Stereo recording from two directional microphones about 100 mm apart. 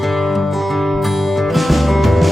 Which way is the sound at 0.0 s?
Centre (ahead or behind).